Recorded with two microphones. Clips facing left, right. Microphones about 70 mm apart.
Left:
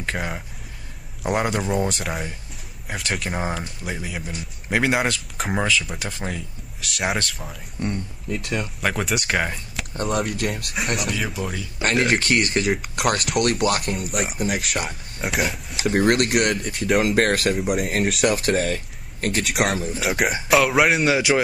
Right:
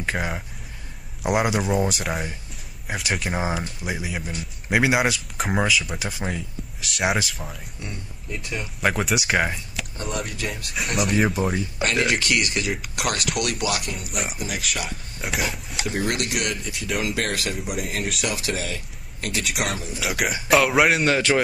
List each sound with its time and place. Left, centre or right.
0.0 s a man's voice: centre
8.4 s speech: left
8.8 s a man's voice: centre
10.2 s speech: left
10.8 s a man's voice: centre
11.1 s speech: right
11.8 s speech: left
13.9 s a man's voice: centre
14.7 s speech: left
15.2 s speech: centre
15.9 s speech: left
19.6 s speech: left
20.2 s speech: left
20.4 s a man's voice: centre